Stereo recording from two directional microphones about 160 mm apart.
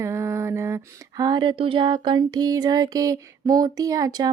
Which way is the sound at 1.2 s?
30° right (ahead or behind).